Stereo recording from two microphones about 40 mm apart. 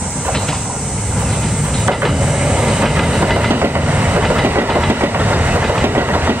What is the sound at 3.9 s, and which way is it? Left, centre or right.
Train, right.